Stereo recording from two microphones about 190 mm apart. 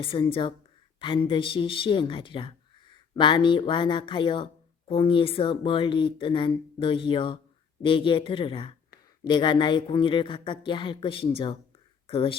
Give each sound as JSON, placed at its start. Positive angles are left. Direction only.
{"t": 0.0, "sound": "speech", "side_deg": 30}